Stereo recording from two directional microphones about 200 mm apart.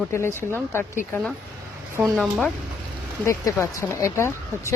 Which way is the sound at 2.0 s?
Centre (ahead or behind).